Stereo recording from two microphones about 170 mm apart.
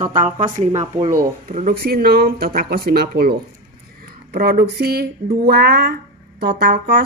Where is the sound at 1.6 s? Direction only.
60° right (ahead or behind).